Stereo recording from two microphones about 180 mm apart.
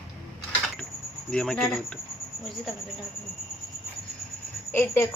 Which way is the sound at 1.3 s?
5° left (ahead or behind).